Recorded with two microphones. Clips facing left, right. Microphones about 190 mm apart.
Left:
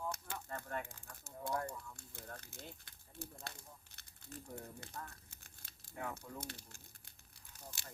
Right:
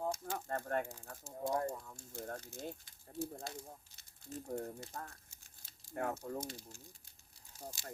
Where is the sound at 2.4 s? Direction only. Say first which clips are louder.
Right 8 dB; 60° left (ahead or behind).